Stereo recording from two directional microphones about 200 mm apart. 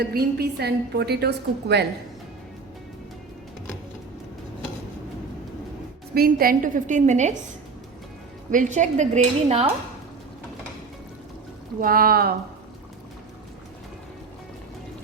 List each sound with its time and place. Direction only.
0.0 s a woman's voice: 50° right (ahead or behind)
6.1 s a woman's voice: 45° right (ahead or behind)
8.4 s a woman's voice: 40° right (ahead or behind)
11.8 s speech: 45° right (ahead or behind)